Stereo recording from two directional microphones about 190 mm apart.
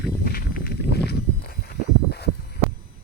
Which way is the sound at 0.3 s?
50° left (ahead or behind).